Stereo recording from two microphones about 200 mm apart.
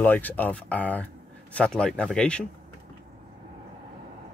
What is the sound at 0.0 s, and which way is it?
Speech, 10° left (ahead or behind).